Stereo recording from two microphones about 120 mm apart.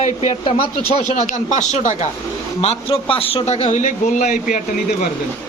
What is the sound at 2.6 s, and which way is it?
A man's voice, 55° left (ahead or behind).